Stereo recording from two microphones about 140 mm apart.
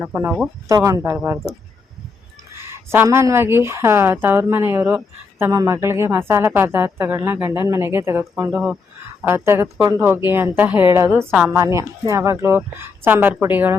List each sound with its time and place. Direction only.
0.0 s a woman's voice: 15° right (ahead or behind)
0.7 s speech: 25° right (ahead or behind)
2.9 s a woman's voice: 20° right (ahead or behind)